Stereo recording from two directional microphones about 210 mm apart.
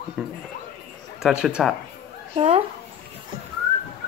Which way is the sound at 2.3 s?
30° right (ahead or behind).